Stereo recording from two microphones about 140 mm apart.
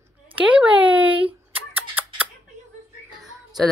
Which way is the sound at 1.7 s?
10° right (ahead or behind).